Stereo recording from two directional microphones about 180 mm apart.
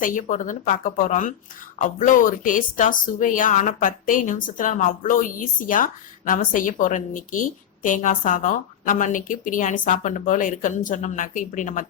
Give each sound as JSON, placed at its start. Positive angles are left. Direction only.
{"t": 0.0, "sound": "a woman's voice", "side_deg": 45}